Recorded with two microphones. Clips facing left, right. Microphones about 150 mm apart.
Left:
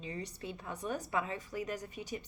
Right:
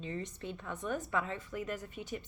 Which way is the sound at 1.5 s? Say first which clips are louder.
Even; 40° left (ahead or behind).